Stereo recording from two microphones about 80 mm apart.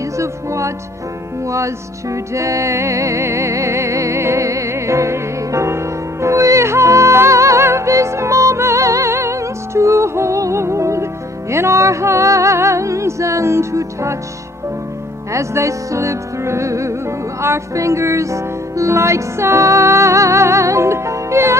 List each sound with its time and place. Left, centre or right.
0.2 s music: right
15.3 s music: right